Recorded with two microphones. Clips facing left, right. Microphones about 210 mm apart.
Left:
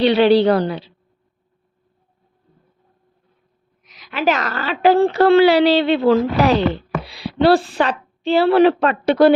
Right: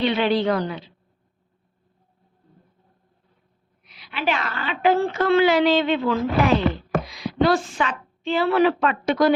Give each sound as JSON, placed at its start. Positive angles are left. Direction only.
{"t": 0.2, "sound": "a woman's voice", "side_deg": 35}
{"t": 3.8, "sound": "a woman's voice", "side_deg": 40}